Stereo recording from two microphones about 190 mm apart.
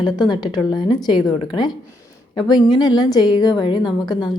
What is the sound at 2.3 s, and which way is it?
A woman's voice, 20° left (ahead or behind).